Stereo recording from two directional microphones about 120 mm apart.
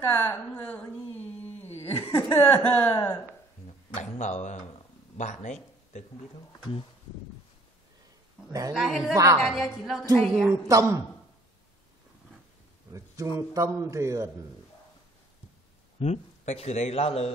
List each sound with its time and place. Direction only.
0.0 s a woman's voice: 20° left (ahead or behind)
4.0 s speech: 80° left
8.5 s a man's voice: 30° right (ahead or behind)
8.7 s a woman's voice: centre (ahead or behind)
9.1 s a man's voice: 25° right (ahead or behind)
9.4 s a woman's voice: centre (ahead or behind)
10.5 s a man's voice: 25° right (ahead or behind)
12.9 s a man's voice: 25° right (ahead or behind)
16.0 s a man's voice: 65° left (ahead or behind)